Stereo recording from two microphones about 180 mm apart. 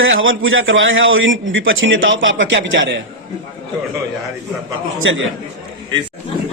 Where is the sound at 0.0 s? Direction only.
90° right.